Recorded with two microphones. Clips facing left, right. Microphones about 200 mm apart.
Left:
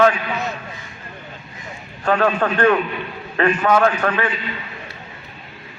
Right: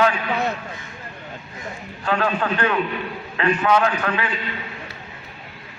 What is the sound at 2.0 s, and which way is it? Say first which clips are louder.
A man's voice: left 4 dB; 40° left (ahead or behind).